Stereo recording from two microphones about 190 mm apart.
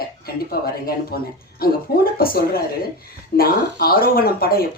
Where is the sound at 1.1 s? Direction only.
55° left (ahead or behind).